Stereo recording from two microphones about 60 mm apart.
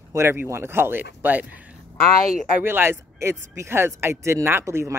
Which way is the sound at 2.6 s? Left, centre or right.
Right.